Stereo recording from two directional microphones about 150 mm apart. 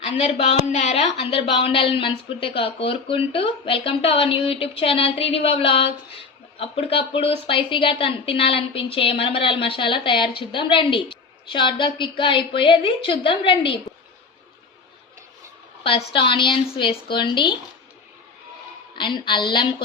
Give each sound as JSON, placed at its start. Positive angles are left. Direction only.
{"t": 0.7, "sound": "a woman's voice", "side_deg": 50}
{"t": 15.8, "sound": "a woman's voice", "side_deg": 35}
{"t": 18.9, "sound": "a woman's voice", "side_deg": 30}